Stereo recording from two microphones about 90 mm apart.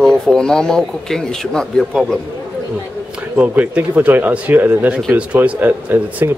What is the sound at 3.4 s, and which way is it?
Speech, 15° right (ahead or behind).